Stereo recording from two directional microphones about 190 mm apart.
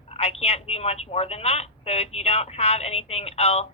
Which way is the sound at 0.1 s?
30° left (ahead or behind).